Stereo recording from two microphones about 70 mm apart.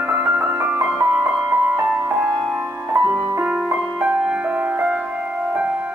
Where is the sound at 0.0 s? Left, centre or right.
Right.